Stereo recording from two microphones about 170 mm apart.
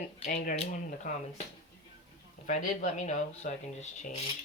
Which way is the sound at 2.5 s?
45° left (ahead or behind).